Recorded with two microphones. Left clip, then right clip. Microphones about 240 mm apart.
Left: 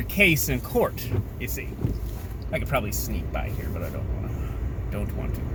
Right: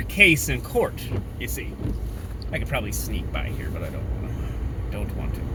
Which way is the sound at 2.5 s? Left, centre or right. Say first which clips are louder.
Left 2 dB; centre.